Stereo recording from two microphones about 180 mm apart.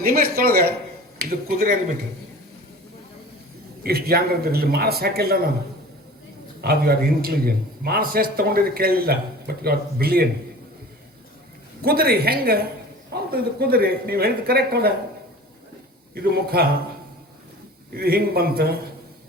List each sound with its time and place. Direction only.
0.1 s a man's voice: 60° right (ahead or behind)
3.8 s a man's voice: 60° right (ahead or behind)
6.6 s a man's voice: 60° right (ahead or behind)
11.8 s a man's voice: 60° right (ahead or behind)
16.1 s a man's voice: 60° right (ahead or behind)
17.9 s a man's voice: 60° right (ahead or behind)